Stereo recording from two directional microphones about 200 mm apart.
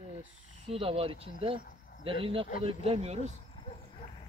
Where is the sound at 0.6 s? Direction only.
30° right (ahead or behind).